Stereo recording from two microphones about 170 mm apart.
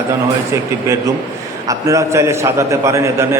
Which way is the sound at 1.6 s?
20° right (ahead or behind).